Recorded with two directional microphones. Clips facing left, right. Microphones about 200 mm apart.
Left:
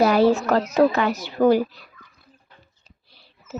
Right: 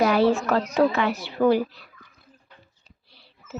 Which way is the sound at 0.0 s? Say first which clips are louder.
Left 3 dB; 40° left (ahead or behind).